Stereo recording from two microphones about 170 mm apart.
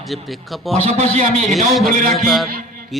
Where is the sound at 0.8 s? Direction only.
40° right (ahead or behind).